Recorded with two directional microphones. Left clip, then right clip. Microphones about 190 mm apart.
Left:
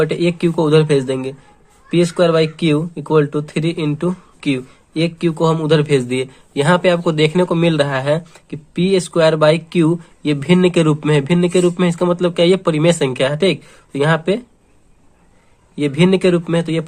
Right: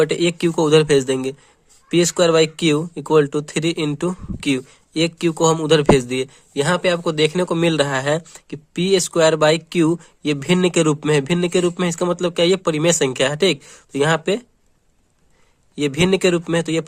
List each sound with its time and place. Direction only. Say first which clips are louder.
0.0 s speech: left 1 dB; 45° right (ahead or behind)
15.7 s speech: left 2 dB; 45° right (ahead or behind)